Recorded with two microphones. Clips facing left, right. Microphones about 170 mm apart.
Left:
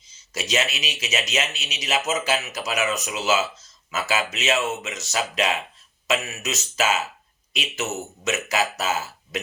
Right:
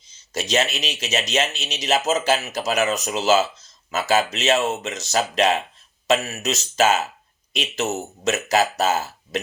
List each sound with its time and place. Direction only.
0.3 s speech: 35° right (ahead or behind)